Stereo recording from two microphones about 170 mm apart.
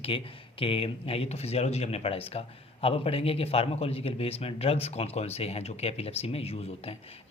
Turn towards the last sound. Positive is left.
turn(degrees=35)  # may be behind; listen again after turning